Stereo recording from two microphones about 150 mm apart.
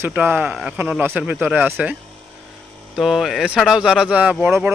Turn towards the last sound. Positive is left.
turn(degrees=-5)  # may be behind; listen again after turning